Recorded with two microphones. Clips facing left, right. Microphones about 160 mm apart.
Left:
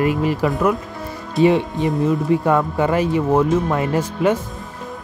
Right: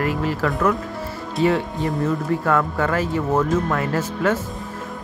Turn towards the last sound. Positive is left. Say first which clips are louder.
# left 3 dB
turn(degrees=15)  # may be behind; listen again after turning